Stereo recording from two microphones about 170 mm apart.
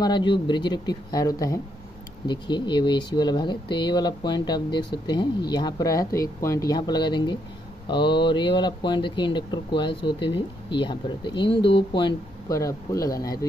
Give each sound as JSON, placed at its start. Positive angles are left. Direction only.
{"t": 0.0, "sound": "speech", "side_deg": 25}